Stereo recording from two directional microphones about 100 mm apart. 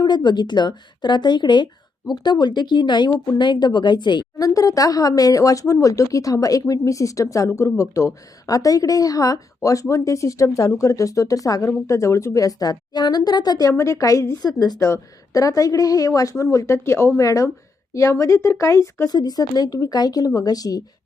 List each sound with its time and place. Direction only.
0.0 s a woman's voice: 45° left (ahead or behind)
13.7 s a woman's voice: 30° left (ahead or behind)